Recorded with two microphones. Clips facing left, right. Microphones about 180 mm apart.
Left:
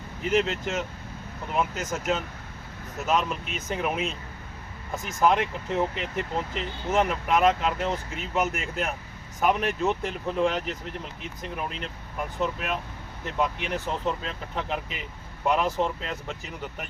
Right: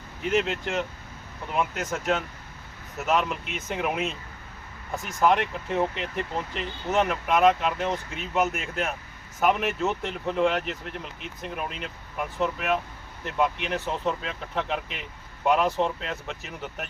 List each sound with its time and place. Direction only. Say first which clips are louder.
0.3 s speech: left 1 dB; centre (ahead or behind)
6.9 s speech: even; centre (ahead or behind)